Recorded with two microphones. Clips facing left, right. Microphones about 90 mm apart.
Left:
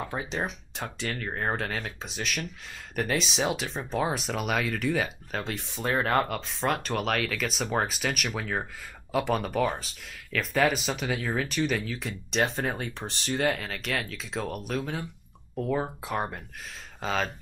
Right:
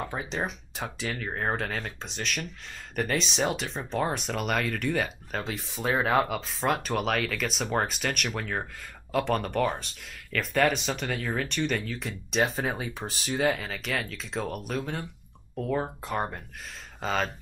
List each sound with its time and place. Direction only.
0.0 s speech: centre (ahead or behind)